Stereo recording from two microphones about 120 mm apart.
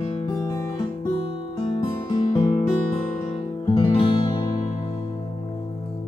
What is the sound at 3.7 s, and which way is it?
Music, 45° left (ahead or behind).